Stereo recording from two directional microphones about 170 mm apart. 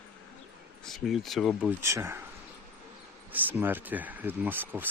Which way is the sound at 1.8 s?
15° right (ahead or behind).